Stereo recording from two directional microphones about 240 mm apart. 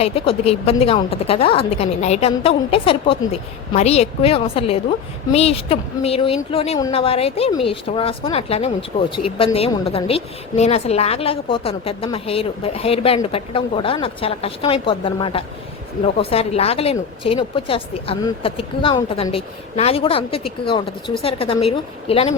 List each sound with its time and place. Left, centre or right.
0.0 s a woman's voice: left